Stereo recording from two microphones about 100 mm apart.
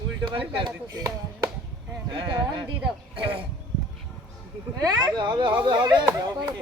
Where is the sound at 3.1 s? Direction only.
60° right (ahead or behind).